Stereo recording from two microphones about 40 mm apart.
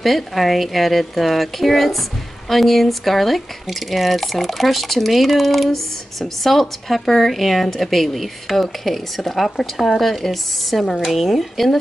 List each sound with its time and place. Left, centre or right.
0.0 s speech: centre